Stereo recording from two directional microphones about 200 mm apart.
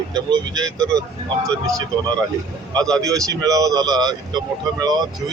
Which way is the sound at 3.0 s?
15° right (ahead or behind).